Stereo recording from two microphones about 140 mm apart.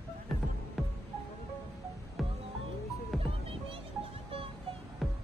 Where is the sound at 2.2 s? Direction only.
Centre (ahead or behind).